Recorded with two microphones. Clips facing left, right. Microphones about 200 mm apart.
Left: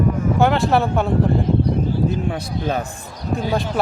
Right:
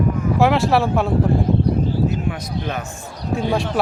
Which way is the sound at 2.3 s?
35° left (ahead or behind).